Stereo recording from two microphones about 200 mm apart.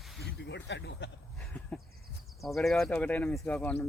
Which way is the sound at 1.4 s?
5° left (ahead or behind).